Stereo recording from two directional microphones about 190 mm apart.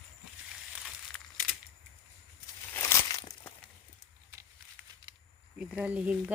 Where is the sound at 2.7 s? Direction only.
15° left (ahead or behind).